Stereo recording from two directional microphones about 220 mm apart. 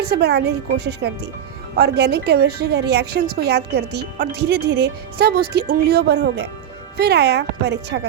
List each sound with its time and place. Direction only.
0.1 s a woman's voice: 50° right (ahead or behind)